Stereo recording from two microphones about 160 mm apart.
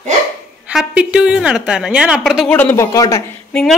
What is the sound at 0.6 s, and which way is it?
A woman's voice, 5° right (ahead or behind).